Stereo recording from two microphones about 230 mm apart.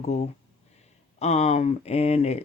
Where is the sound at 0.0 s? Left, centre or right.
Left.